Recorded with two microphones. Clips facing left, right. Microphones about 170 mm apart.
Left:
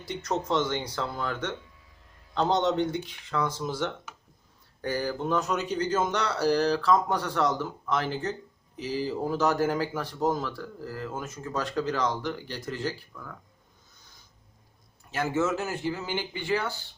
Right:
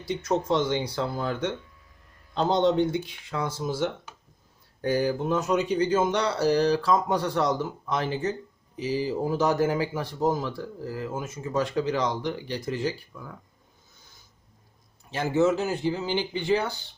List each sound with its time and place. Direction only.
0.0 s speech: 10° right (ahead or behind)
15.1 s speech: 20° right (ahead or behind)